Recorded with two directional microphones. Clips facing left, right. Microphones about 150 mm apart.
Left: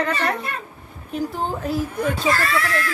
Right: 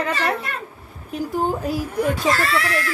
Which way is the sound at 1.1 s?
10° right (ahead or behind).